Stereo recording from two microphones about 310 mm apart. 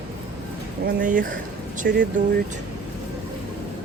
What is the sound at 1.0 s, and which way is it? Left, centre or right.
Speech, right.